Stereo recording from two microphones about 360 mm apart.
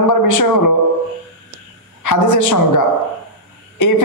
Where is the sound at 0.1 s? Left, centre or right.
Left.